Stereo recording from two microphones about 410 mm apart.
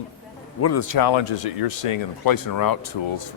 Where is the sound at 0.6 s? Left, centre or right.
Left.